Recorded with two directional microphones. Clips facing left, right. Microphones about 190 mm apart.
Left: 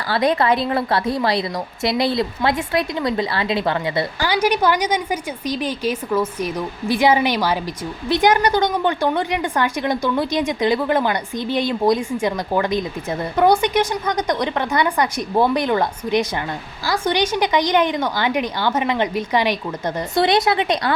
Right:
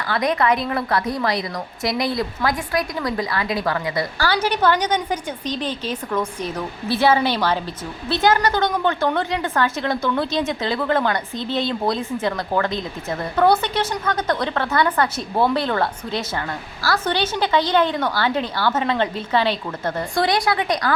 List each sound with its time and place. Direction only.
0.1 s a woman's voice: 30° left (ahead or behind)
4.3 s speech: 10° left (ahead or behind)